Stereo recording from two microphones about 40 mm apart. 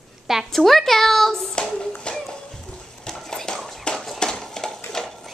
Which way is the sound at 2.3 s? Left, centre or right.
Centre.